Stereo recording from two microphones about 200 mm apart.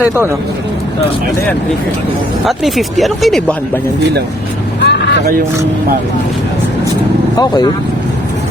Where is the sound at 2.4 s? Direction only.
Centre (ahead or behind).